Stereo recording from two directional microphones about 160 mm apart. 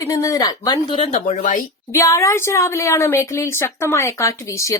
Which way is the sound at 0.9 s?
40° left (ahead or behind).